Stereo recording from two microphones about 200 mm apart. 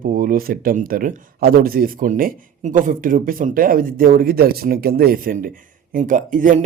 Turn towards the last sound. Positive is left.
turn(degrees=-40)  # may be behind; listen again after turning